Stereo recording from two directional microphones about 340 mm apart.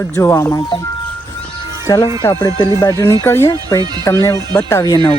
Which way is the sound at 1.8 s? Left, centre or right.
Centre.